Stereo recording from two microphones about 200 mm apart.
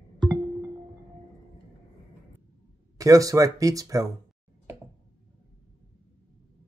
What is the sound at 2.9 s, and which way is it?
Speech, 15° right (ahead or behind).